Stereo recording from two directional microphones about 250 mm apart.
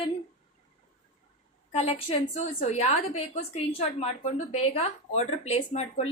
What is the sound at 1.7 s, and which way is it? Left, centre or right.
A woman's voice, left.